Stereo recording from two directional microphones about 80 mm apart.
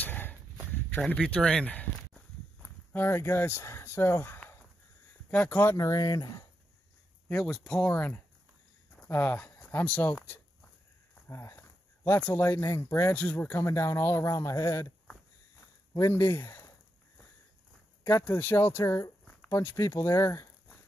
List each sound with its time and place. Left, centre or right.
0.0 s a sound: left
1.1 s speech: centre
2.9 s speech: left
5.8 s speech: left
7.2 s speech: centre
9.1 s speech: left
11.2 s a sound: left
12.2 s speech: left
13.1 s speech: centre
13.5 s speech: left
16.1 s speech: left
18.0 s speech: left